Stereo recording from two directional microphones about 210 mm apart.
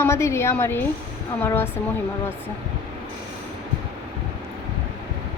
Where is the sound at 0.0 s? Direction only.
15° left (ahead or behind).